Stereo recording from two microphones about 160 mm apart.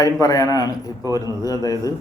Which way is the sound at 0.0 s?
20° left (ahead or behind).